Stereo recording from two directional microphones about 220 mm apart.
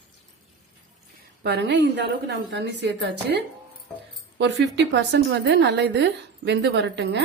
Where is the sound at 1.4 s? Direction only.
50° right (ahead or behind).